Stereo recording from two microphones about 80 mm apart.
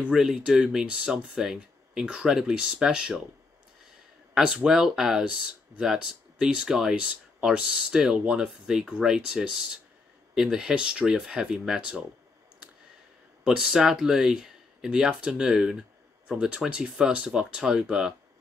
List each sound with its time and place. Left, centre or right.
0.1 s speech: centre
4.3 s a sound: centre
4.6 s speech: centre
13.4 s speech: centre